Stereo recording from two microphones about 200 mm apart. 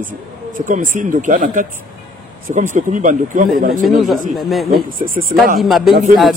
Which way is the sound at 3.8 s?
Centre (ahead or behind).